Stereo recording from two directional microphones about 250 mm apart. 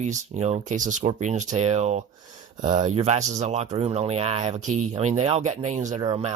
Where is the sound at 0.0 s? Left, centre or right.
Right.